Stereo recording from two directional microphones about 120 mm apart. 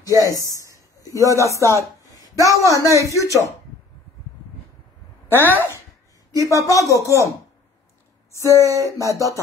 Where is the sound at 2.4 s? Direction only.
25° left (ahead or behind).